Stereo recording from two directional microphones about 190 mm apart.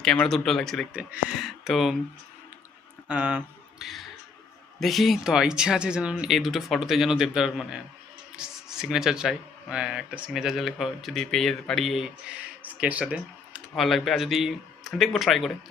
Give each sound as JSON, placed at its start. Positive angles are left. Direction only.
{"t": 0.0, "sound": "speech", "side_deg": 5}
{"t": 3.1, "sound": "speech", "side_deg": -10}